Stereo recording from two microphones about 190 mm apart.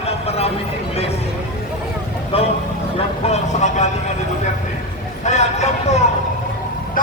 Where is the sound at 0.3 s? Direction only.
35° left (ahead or behind).